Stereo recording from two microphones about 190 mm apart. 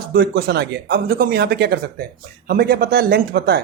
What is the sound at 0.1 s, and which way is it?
Speech, 55° right (ahead or behind).